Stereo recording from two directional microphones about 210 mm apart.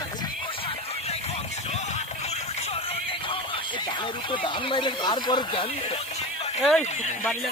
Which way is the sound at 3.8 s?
25° left (ahead or behind).